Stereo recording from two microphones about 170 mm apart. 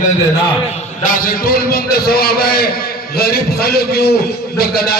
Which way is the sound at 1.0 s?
55° left (ahead or behind).